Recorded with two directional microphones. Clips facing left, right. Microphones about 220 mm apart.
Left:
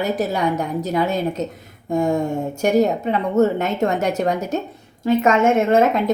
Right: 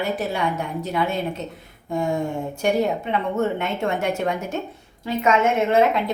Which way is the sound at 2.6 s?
40° left (ahead or behind).